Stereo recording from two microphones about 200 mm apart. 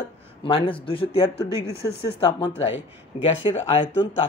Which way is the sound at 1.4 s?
55° left (ahead or behind).